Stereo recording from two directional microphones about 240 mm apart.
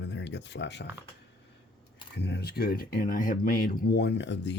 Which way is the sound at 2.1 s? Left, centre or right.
Left.